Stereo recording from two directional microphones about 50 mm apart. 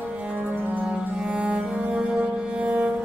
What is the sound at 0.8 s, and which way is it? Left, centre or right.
Music, centre.